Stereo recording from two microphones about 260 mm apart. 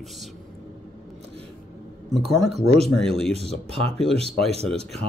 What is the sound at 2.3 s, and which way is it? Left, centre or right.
Speech, centre.